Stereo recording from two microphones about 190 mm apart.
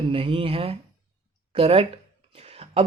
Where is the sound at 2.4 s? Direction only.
35° right (ahead or behind).